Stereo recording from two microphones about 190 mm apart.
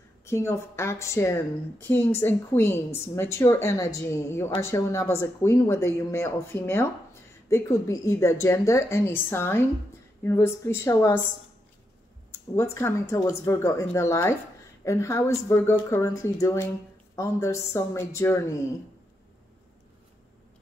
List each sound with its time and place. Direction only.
0.2 s a woman's voice: 15° left (ahead or behind)
12.3 s a woman's voice: 15° left (ahead or behind)